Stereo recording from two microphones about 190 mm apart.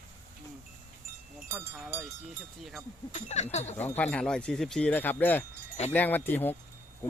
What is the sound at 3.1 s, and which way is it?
Speech, 35° left (ahead or behind).